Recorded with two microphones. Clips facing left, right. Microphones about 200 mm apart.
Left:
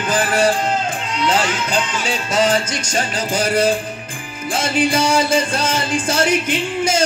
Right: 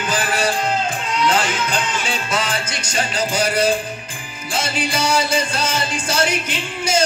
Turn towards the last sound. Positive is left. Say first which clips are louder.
# left 4 dB
turn(degrees=50)  # may be behind; listen again after turning